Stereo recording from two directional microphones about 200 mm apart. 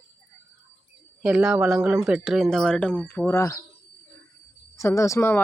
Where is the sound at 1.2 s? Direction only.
5° right (ahead or behind); by 3.6 s 15° left (ahead or behind).